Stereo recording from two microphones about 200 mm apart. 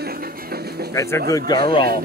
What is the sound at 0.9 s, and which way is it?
Speech, 15° left (ahead or behind).